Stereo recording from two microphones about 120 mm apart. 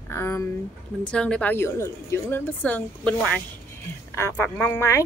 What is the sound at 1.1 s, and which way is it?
A woman's voice, 10° left (ahead or behind).